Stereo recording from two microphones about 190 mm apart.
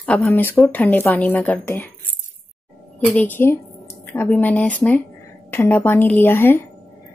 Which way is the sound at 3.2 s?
10° left (ahead or behind).